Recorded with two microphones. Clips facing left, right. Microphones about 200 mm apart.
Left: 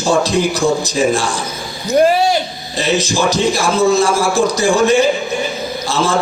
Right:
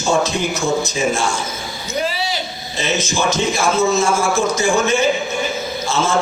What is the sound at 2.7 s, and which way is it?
A man's voice, 35° left (ahead or behind).